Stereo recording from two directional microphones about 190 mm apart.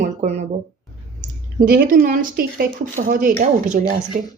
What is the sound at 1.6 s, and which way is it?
A woman's voice, 50° right (ahead or behind).